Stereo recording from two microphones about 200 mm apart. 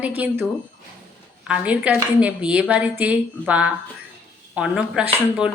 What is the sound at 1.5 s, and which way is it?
Speech, 5° right (ahead or behind).